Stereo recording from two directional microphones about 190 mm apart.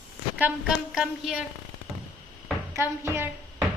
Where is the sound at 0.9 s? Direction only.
5° right (ahead or behind).